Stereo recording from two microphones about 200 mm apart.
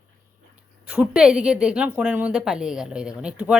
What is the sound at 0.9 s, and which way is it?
Speech, 5° right (ahead or behind).